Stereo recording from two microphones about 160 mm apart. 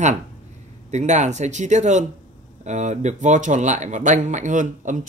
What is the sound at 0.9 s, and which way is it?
Speech, 45° right (ahead or behind).